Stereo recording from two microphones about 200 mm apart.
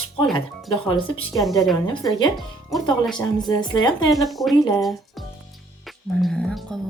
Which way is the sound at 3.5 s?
20° left (ahead or behind).